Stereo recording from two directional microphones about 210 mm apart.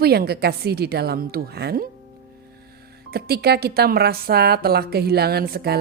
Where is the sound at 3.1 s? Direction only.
50° right (ahead or behind).